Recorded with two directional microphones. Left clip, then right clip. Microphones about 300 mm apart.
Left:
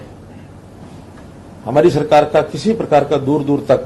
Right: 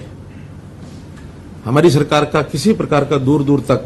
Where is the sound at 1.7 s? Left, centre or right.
Right.